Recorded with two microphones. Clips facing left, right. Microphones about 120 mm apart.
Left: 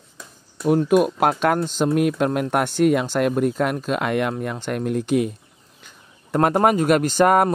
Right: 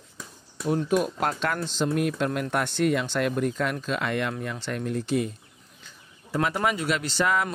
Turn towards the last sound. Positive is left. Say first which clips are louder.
# left 9 dB
turn(degrees=50)  # may be behind; listen again after turning